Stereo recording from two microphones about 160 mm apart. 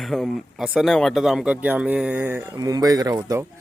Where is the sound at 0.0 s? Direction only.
Centre (ahead or behind).